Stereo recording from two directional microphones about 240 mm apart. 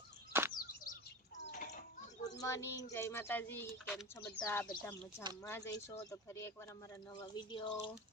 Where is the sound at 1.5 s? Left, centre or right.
Left.